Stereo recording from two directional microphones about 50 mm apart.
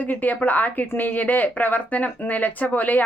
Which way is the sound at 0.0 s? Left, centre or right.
Left.